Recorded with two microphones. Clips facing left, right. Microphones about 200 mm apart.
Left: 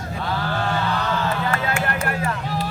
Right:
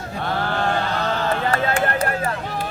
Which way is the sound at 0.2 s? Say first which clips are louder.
Right 2 dB; 55° right (ahead or behind).